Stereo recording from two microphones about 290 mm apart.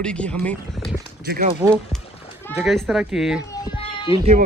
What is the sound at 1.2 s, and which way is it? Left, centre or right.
Speech, right.